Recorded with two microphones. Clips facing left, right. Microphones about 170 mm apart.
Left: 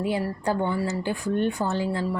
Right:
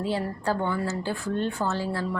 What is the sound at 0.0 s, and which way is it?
A woman's voice, 15° left (ahead or behind).